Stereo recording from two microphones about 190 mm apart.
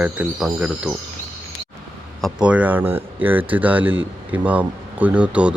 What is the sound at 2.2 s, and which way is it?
Speech, centre (ahead or behind).